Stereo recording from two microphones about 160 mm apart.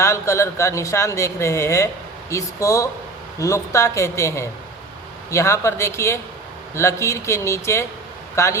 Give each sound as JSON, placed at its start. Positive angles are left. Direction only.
{"t": 0.0, "sound": "speech", "side_deg": 20}